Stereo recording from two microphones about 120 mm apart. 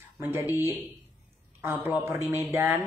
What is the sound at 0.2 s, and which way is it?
Speech, 20° right (ahead or behind).